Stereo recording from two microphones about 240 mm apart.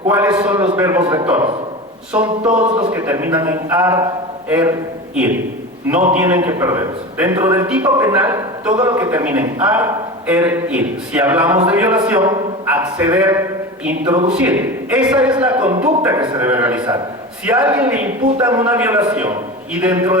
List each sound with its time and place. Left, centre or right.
0.1 s a man's voice: centre
2.5 s a man's voice: right
2.9 s a man's voice: centre
6.1 s a man's voice: centre